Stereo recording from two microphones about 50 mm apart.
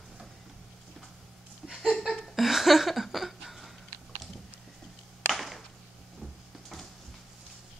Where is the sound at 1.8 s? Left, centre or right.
Centre.